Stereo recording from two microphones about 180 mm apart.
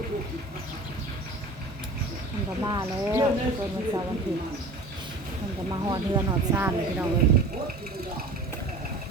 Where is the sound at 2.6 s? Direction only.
20° right (ahead or behind).